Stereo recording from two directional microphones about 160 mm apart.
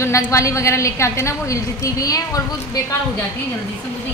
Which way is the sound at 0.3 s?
20° left (ahead or behind).